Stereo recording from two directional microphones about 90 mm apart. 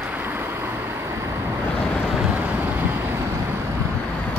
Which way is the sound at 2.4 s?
20° right (ahead or behind).